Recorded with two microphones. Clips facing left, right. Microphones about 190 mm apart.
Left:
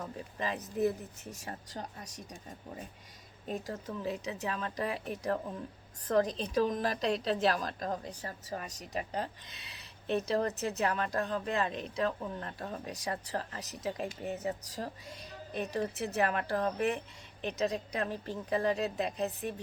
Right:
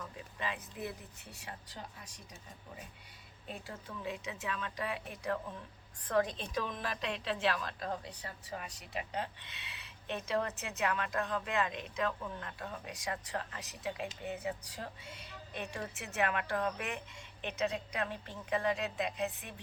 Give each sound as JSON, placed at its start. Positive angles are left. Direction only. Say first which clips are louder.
{"t": 0.0, "sound": "speech", "louder": "left 4 dB", "side_deg": 40}
{"t": 3.4, "sound": "a woman's voice", "louder": "left 8 dB", "side_deg": 40}